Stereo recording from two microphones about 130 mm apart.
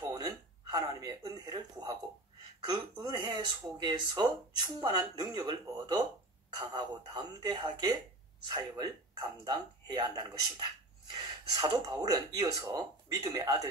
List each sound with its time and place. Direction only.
0.0 s speech: 30° right (ahead or behind)